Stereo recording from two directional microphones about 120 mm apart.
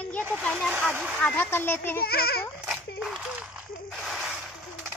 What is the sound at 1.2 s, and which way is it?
Speech, 10° left (ahead or behind).